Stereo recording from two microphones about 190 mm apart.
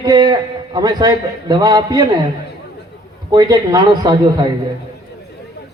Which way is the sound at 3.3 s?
20° right (ahead or behind).